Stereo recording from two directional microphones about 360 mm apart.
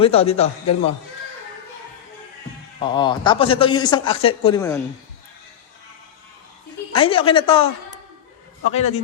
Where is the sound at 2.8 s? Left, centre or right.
Centre.